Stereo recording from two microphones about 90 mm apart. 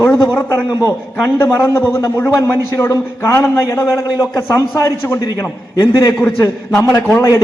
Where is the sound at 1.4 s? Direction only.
30° left (ahead or behind).